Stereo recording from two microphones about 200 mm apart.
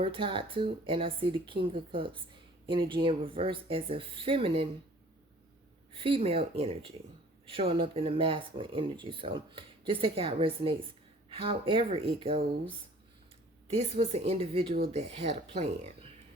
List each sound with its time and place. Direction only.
0.0 s speech: 25° right (ahead or behind)
5.9 s speech: 25° right (ahead or behind)
13.7 s speech: 30° right (ahead or behind)